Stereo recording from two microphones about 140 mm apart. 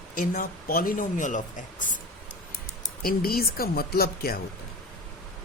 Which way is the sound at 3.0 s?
90° left.